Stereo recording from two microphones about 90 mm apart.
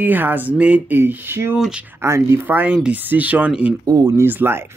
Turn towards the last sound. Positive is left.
turn(degrees=-25)  # may be behind; listen again after turning